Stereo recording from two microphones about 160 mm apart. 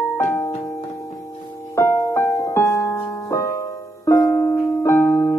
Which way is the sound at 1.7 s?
20° left (ahead or behind).